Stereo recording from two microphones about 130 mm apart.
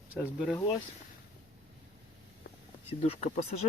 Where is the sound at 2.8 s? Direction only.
50° left (ahead or behind).